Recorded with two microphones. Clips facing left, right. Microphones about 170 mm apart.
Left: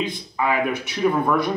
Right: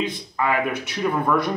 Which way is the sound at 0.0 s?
Centre (ahead or behind).